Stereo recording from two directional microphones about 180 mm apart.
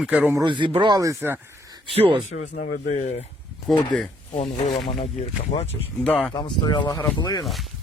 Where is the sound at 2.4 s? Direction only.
45° left (ahead or behind).